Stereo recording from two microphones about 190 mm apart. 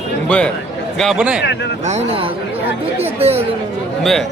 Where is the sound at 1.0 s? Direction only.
Centre (ahead or behind).